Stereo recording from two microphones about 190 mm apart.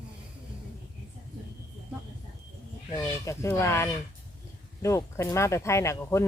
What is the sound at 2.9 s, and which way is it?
Speech, 15° left (ahead or behind).